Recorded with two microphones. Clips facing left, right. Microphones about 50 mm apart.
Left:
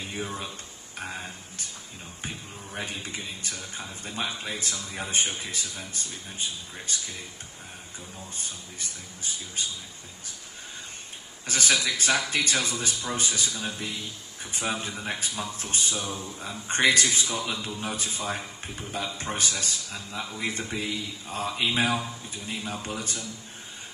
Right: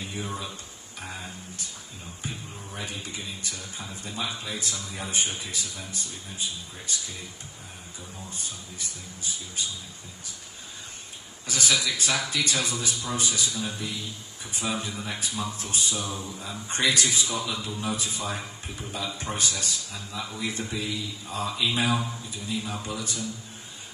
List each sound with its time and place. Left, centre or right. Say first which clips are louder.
0.9 s speech: left 2 dB; left
2.8 s a man's voice: left 2 dB; left
9.6 s a man's voice: even; left
11.4 s a man's voice: left 1 dB; left
16.0 s speech: even; right
16.3 s a man's voice: left 5 dB; left